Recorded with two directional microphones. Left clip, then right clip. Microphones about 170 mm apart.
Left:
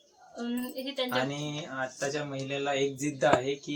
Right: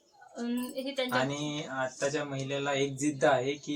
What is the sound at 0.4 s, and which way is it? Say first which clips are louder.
Speech: even; 15° right (ahead or behind).